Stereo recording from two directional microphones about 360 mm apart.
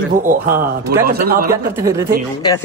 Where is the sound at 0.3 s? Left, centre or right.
Right.